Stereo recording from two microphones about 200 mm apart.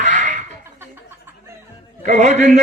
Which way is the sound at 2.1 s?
35° right (ahead or behind).